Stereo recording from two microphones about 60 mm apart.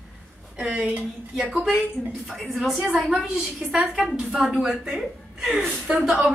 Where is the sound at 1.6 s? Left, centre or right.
Centre.